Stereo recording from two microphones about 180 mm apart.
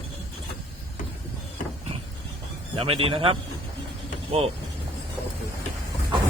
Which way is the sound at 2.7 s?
30° right (ahead or behind).